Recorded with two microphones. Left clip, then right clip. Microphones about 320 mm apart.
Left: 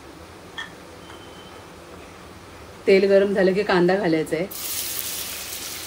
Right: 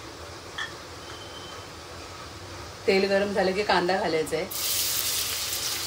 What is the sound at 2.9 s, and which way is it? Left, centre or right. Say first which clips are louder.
Speech: left 7 dB; left.